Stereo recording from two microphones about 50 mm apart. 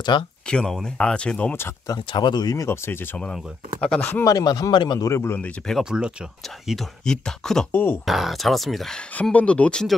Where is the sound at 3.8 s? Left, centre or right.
Left.